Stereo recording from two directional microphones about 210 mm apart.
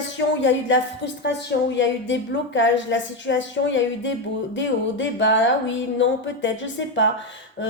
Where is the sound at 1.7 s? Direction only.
60° left (ahead or behind).